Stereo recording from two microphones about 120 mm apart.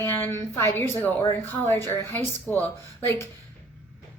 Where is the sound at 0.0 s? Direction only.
20° left (ahead or behind).